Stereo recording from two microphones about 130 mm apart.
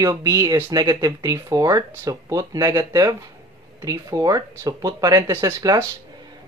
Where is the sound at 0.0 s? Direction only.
25° right (ahead or behind).